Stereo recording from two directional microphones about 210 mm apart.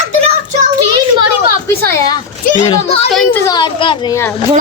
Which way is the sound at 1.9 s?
15° left (ahead or behind).